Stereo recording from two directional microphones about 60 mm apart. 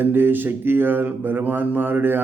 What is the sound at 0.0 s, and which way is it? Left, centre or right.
Speech, right.